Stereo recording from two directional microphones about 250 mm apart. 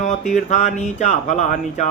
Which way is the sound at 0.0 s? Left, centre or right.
Left.